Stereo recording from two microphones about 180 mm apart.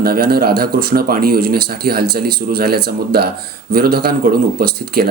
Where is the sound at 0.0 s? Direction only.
60° right (ahead or behind).